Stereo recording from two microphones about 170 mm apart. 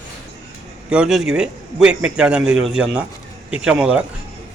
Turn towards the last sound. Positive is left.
turn(degrees=-5)  # may be behind; listen again after turning